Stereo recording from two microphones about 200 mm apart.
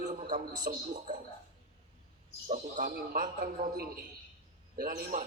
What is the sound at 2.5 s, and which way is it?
Speech, 40° right (ahead or behind).